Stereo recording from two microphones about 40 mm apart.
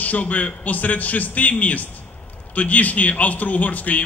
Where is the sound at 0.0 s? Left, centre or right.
Left.